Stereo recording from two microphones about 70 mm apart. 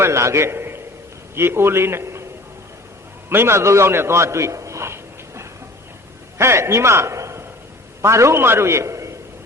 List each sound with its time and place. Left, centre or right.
0.0 s a man's voice: right
3.2 s a man's voice: right